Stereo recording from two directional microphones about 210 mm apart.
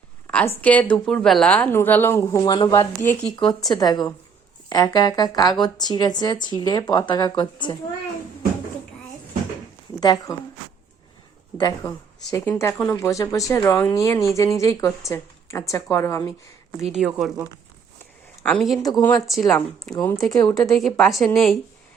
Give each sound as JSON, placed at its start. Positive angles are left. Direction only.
{"t": 0.3, "sound": "speech", "side_deg": 5}
{"t": 10.0, "sound": "speech", "side_deg": 20}
{"t": 11.5, "sound": "speech", "side_deg": 20}
{"t": 16.9, "sound": "speech", "side_deg": 0}
{"t": 18.4, "sound": "speech", "side_deg": 0}
{"t": 18.8, "sound": "speech", "side_deg": 20}
{"t": 19.2, "sound": "speech", "side_deg": 0}
{"t": 20.3, "sound": "speech", "side_deg": 15}
{"t": 20.7, "sound": "speech", "side_deg": 0}